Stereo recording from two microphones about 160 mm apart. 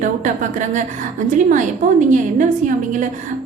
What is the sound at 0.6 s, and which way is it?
A woman's voice, 50° right (ahead or behind).